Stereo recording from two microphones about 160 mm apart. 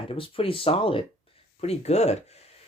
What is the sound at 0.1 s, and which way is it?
Speech, 35° left (ahead or behind).